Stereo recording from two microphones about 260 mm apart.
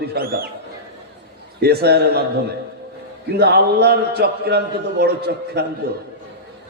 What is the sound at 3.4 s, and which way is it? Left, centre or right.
A man's voice, right.